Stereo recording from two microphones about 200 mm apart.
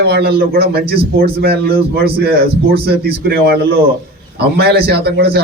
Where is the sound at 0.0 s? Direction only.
50° right (ahead or behind).